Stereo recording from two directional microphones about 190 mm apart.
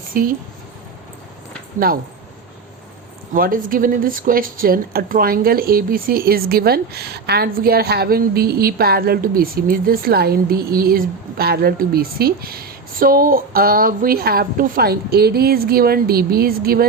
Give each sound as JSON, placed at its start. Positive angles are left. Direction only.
{"t": 0.1, "sound": "a woman's voice", "side_deg": -45}
{"t": 1.8, "sound": "speech", "side_deg": -50}
{"t": 3.3, "sound": "speech", "side_deg": -50}